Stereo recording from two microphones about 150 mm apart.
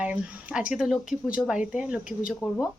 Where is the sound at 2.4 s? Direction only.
15° left (ahead or behind).